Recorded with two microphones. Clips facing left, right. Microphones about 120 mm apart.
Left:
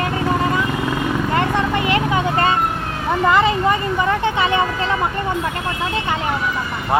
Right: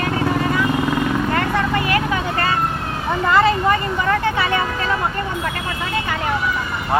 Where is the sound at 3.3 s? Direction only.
15° left (ahead or behind).